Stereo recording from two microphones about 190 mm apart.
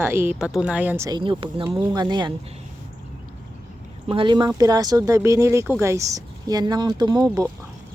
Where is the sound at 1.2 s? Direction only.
25° right (ahead or behind).